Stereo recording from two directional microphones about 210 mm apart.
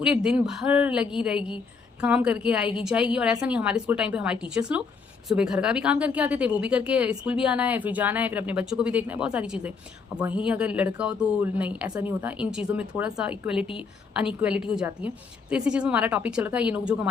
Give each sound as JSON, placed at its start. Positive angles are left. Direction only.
{"t": 0.0, "sound": "speech", "side_deg": -5}